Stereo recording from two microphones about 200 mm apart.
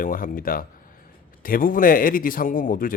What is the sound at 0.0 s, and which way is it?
Speech, 45° left (ahead or behind).